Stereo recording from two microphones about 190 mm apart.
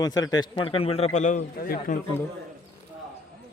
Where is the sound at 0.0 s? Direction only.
20° left (ahead or behind); by 2.0 s 45° left (ahead or behind).